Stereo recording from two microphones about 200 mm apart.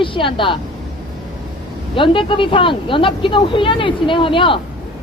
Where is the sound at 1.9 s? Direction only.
25° left (ahead or behind).